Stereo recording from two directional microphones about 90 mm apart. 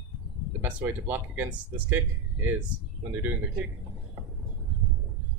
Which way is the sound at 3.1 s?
20° right (ahead or behind).